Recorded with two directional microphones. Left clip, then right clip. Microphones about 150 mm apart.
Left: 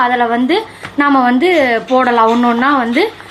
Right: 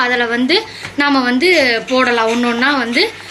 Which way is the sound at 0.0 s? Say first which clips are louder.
Left 2 dB; 20° left (ahead or behind).